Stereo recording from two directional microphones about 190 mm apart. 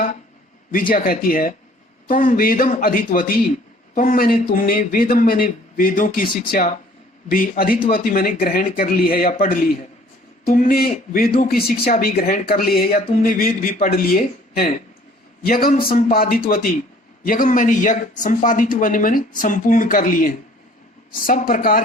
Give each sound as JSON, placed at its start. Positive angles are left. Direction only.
{"t": 0.7, "sound": "a man's voice", "side_deg": 45}